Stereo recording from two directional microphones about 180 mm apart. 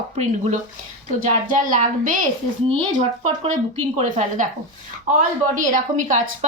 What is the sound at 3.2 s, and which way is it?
A woman's voice, 35° right (ahead or behind).